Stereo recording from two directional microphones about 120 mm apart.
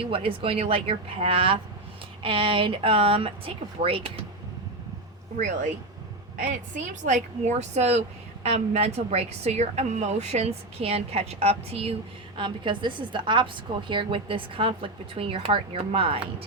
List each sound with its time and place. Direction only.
0.1 s a woman's voice: 50° right (ahead or behind)
5.4 s a woman's voice: 90° right; by 11.9 s 55° right (ahead or behind)
12.4 s a woman's voice: 45° right (ahead or behind)